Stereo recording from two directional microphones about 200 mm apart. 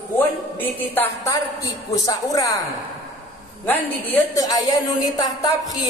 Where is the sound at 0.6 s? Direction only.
10° left (ahead or behind).